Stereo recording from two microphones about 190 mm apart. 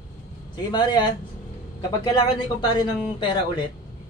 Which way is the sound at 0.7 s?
25° left (ahead or behind).